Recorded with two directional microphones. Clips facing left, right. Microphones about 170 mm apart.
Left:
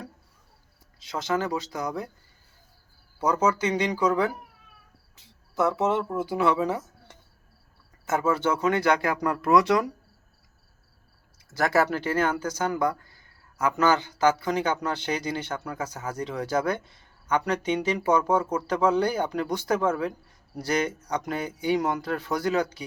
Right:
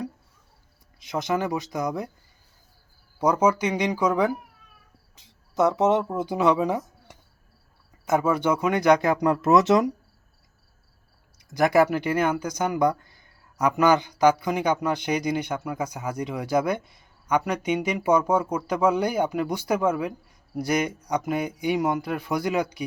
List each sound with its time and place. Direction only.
0.9 s speech: 15° right (ahead or behind)
3.2 s speech: 10° right (ahead or behind)
11.3 s speech: 15° right (ahead or behind)